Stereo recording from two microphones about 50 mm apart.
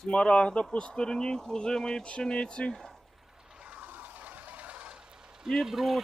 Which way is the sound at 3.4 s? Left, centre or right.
Right.